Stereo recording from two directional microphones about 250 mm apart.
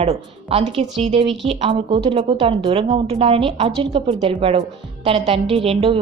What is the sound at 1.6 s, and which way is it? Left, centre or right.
A woman's voice, centre.